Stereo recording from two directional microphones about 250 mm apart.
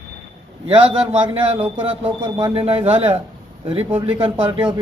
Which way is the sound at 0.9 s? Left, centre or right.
Right.